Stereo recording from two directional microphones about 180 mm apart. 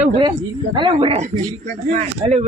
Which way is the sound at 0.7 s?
30° right (ahead or behind).